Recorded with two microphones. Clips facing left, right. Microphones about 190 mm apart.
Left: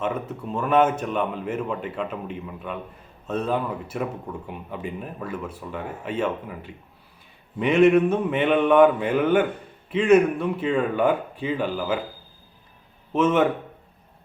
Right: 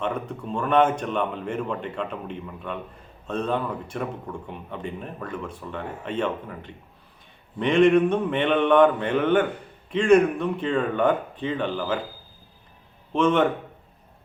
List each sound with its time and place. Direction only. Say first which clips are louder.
0.0 s a man's voice: left 1 dB; 5° left (ahead or behind)
13.1 s speech: left 1 dB; 5° left (ahead or behind)